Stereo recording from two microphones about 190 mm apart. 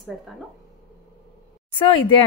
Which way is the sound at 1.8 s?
25° left (ahead or behind).